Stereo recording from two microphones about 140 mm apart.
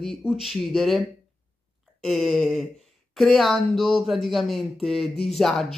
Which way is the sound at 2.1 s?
Centre (ahead or behind).